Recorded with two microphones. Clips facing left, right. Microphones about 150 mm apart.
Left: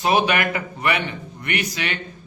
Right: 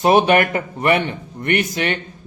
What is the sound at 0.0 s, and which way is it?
A man's voice, 50° right (ahead or behind).